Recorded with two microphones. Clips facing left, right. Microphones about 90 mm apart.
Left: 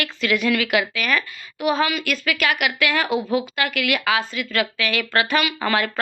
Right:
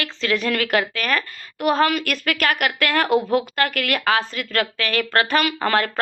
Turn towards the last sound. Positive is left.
turn(degrees=-45)  # may be behind; listen again after turning